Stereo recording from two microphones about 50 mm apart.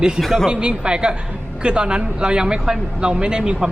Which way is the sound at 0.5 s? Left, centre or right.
Right.